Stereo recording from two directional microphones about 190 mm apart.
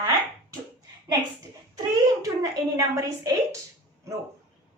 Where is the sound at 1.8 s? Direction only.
20° right (ahead or behind).